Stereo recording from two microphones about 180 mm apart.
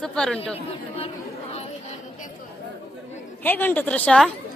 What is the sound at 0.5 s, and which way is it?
Speech, 35° left (ahead or behind).